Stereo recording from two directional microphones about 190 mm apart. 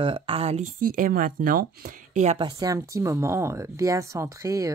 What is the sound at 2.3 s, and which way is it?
Speech, 20° right (ahead or behind).